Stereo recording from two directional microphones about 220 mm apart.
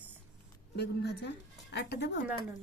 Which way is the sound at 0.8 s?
50° left (ahead or behind).